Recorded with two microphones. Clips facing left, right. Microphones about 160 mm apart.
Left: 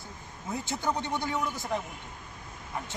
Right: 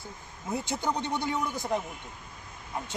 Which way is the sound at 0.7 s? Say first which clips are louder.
Left 1 dB; 15° right (ahead or behind).